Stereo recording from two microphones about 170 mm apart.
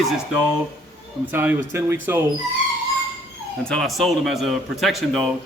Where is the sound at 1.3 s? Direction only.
10° right (ahead or behind).